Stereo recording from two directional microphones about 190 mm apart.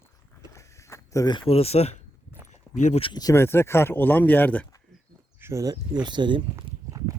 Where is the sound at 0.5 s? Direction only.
15° left (ahead or behind); by 2.0 s 35° left (ahead or behind).